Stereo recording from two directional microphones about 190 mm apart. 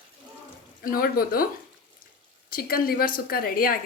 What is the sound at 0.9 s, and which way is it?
Speech, 50° left (ahead or behind).